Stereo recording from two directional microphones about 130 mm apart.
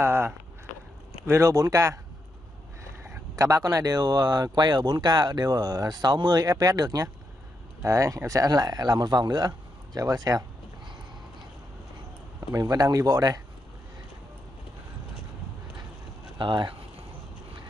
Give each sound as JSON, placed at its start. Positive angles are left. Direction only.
{"t": 0.0, "sound": "a sound", "side_deg": -20}
{"t": 1.2, "sound": "speech", "side_deg": -20}
{"t": 3.0, "sound": "speech", "side_deg": -20}
{"t": 12.5, "sound": "speech", "side_deg": -30}
{"t": 16.3, "sound": "speech", "side_deg": -40}